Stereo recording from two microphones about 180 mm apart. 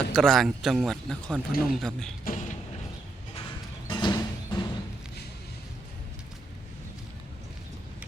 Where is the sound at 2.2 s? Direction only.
45° left (ahead or behind).